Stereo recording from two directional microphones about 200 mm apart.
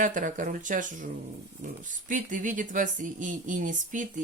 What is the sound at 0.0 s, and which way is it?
Speech, 40° right (ahead or behind).